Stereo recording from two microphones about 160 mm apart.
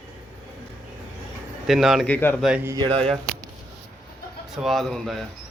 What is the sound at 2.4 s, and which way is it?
Speech, 5° right (ahead or behind).